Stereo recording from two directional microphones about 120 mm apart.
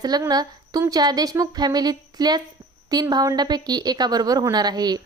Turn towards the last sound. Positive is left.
turn(degrees=-35)  # may be behind; listen again after turning